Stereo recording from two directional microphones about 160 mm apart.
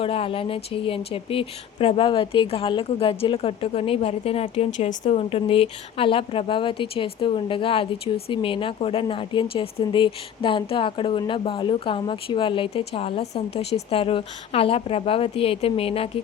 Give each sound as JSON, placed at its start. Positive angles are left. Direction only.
{"t": 0.0, "sound": "speech", "side_deg": 35}